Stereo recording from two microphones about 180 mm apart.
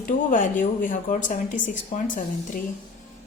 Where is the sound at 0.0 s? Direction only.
45° left (ahead or behind).